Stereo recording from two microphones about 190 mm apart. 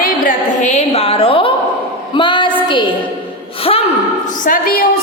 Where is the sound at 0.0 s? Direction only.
40° left (ahead or behind); by 2.5 s 25° left (ahead or behind).